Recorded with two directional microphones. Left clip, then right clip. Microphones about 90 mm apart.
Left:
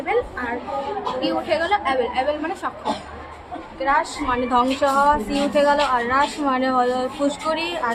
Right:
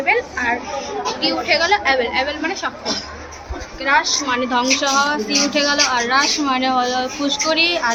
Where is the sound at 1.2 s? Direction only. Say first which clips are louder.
Right 5 dB; 40° left (ahead or behind).